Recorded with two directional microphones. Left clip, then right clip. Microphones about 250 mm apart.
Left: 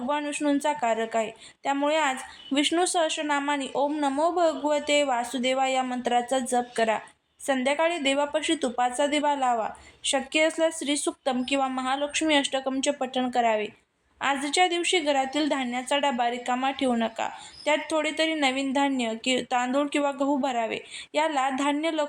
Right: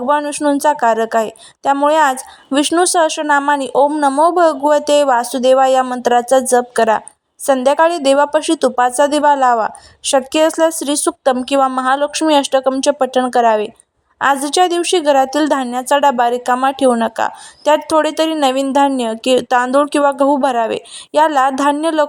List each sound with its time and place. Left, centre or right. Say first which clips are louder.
0.1 s a woman's voice: right 12 dB; right